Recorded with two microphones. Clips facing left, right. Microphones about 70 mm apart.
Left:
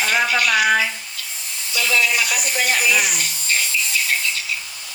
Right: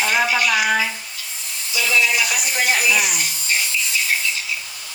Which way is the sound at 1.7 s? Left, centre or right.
Left.